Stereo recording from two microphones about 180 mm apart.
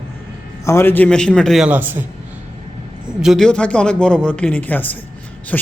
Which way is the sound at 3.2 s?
Centre (ahead or behind).